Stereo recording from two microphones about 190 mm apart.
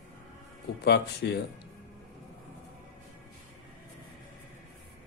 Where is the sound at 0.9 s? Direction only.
60° left (ahead or behind).